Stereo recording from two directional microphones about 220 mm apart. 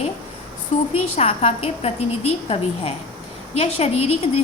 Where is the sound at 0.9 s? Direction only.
75° left (ahead or behind).